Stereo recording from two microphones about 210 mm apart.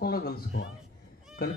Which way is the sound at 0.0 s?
45° left (ahead or behind).